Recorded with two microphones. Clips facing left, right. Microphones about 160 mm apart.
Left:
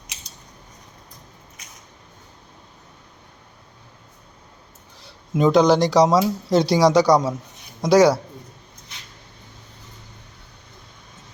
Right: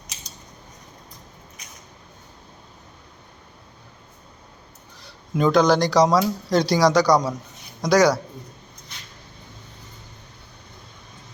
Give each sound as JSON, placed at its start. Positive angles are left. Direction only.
{"t": 5.3, "sound": "speech", "side_deg": 25}